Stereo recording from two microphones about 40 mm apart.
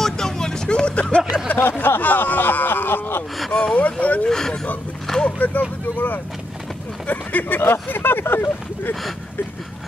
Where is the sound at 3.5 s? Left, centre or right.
Centre.